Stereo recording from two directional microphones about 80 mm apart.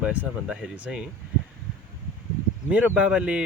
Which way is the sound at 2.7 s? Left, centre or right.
Centre.